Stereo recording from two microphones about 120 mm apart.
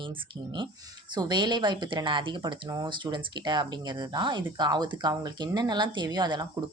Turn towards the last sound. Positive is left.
turn(degrees=-35)  # may be behind; listen again after turning